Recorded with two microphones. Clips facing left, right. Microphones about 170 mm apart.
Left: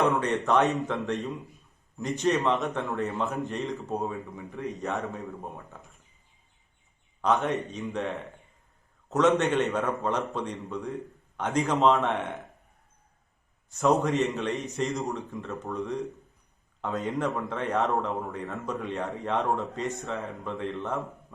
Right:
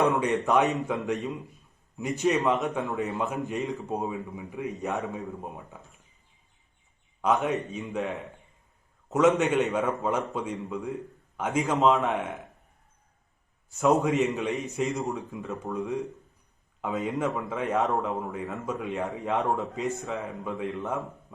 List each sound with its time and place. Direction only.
0.0 s a man's voice: 20° right (ahead or behind)
0.3 s a man's voice: centre (ahead or behind)
0.6 s a man's voice: 15° right (ahead or behind)
2.2 s a man's voice: centre (ahead or behind)
4.4 s a man's voice: 15° right (ahead or behind)
7.2 s a man's voice: 5° right (ahead or behind)
14.1 s a man's voice: centre (ahead or behind)
15.1 s a man's voice: 10° right (ahead or behind)
15.7 s a man's voice: centre (ahead or behind)